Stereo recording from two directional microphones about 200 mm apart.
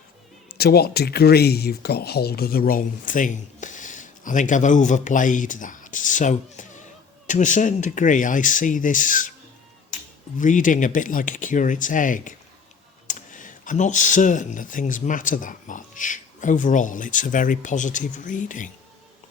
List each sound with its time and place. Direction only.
0.5 s speech: 50° left (ahead or behind)
10.3 s speech: 40° left (ahead or behind)